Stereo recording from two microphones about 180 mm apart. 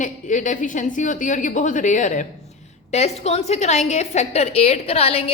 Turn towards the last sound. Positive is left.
turn(degrees=35)  # may be behind; listen again after turning